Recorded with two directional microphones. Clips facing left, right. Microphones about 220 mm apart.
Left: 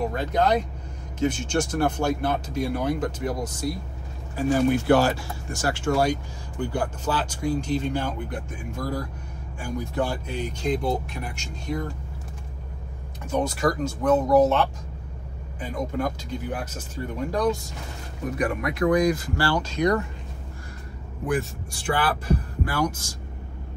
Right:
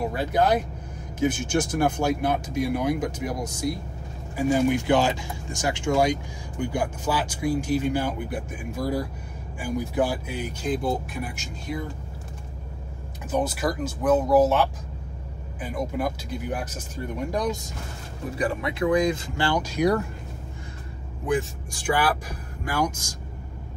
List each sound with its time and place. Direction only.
0.0 s speech: 5° right (ahead or behind)
13.3 s speech: 5° right (ahead or behind)
18.3 s speech: 30° right (ahead or behind); by 20.1 s 5° right (ahead or behind)
21.4 s speech: 15° right (ahead or behind)